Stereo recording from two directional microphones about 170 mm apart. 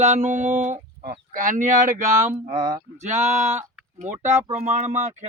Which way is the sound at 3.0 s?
40° right (ahead or behind).